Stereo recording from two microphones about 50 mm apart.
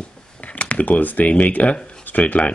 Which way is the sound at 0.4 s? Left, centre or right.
Left.